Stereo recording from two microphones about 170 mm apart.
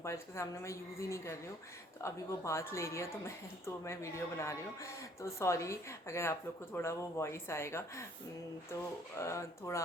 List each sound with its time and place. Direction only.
0.0 s speech: 15° left (ahead or behind)
9.1 s speech: 15° left (ahead or behind)